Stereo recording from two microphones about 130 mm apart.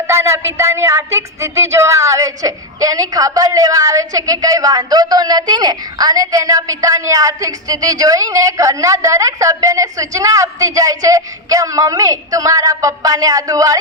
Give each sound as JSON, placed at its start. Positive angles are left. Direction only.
{"t": 0.1, "sound": "speech", "side_deg": -20}